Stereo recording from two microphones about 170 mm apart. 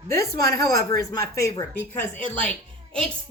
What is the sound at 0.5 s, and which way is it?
Speech, 20° left (ahead or behind).